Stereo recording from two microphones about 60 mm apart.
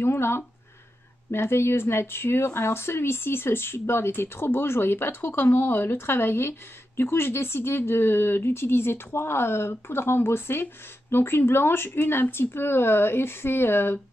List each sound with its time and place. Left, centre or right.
0.0 s speech: left